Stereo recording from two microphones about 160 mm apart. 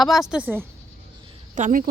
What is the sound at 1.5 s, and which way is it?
Speech, 55° right (ahead or behind).